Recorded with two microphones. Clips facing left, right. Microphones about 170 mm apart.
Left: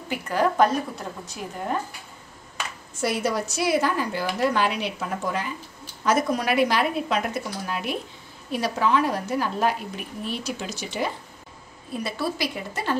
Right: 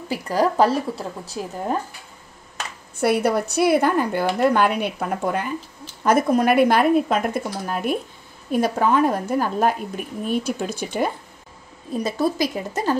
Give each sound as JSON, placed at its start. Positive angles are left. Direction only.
{"t": 0.1, "sound": "a woman's voice", "side_deg": -35}
{"t": 3.0, "sound": "a woman's voice", "side_deg": -60}